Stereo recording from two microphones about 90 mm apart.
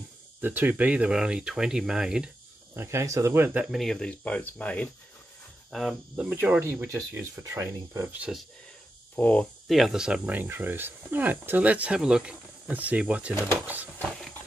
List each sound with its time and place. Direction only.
0.4 s speech: 20° right (ahead or behind)
2.7 s speech: 30° right (ahead or behind)
3.7 s speech: 5° left (ahead or behind)
5.7 s speech: centre (ahead or behind)
6.1 s speech: 20° right (ahead or behind)
8.3 s speech: 10° right (ahead or behind)
9.1 s speech: 15° left (ahead or behind)
9.7 s speech: centre (ahead or behind)
10.2 s speech: 20° right (ahead or behind)